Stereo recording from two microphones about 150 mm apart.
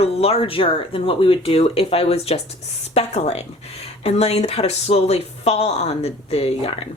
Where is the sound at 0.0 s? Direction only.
40° left (ahead or behind).